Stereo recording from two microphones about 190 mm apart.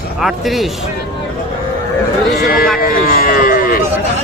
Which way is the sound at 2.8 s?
50° left (ahead or behind).